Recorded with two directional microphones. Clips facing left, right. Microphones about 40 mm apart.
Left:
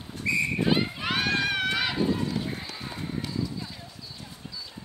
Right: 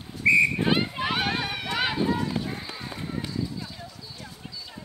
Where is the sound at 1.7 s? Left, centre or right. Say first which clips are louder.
Right 1 dB; right.